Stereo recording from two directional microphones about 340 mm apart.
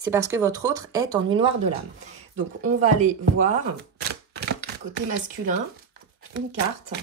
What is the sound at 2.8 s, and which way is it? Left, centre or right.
Speech, right.